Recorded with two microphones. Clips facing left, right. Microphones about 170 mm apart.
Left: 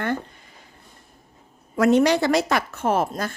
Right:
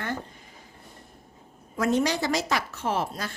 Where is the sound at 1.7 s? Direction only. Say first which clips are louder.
Left 7 dB; 70° left (ahead or behind); by 3.4 s 50° left (ahead or behind).